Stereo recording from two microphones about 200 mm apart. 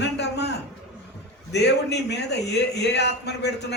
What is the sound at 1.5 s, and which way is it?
A man's voice, 60° left (ahead or behind).